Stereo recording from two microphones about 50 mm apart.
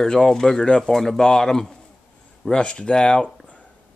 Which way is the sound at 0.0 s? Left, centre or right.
Centre.